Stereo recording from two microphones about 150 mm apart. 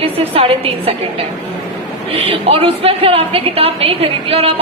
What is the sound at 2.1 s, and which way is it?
A woman's voice, 40° right (ahead or behind).